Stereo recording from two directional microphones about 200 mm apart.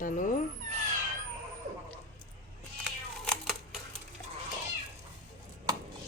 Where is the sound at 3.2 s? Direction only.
Centre (ahead or behind).